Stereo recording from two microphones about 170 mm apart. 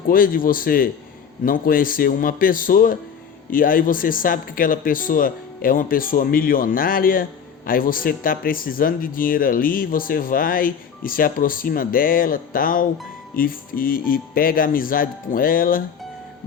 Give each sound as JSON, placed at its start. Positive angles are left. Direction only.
{"t": 0.1, "sound": "speech", "side_deg": 55}